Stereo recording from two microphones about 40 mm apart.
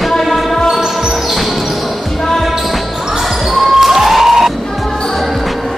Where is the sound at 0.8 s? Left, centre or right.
Centre.